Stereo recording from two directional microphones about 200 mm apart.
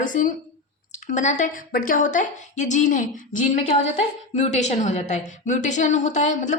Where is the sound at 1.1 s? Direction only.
35° left (ahead or behind).